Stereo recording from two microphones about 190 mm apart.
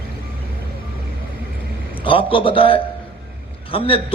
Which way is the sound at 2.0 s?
25° left (ahead or behind).